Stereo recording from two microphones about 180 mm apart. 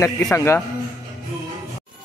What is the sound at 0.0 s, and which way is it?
Speech, 15° left (ahead or behind).